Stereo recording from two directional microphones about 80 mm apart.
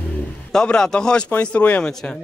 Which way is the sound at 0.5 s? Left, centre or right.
Centre.